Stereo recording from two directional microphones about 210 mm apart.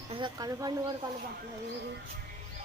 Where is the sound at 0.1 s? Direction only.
20° right (ahead or behind).